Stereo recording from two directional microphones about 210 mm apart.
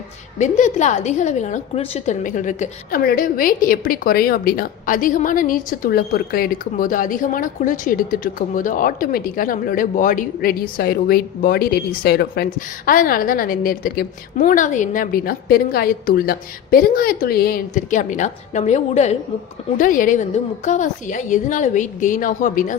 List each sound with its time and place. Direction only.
0.3 s a woman's voice: 35° left (ahead or behind)